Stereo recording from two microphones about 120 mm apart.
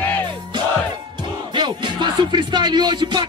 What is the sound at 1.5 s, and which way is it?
Music, 40° right (ahead or behind).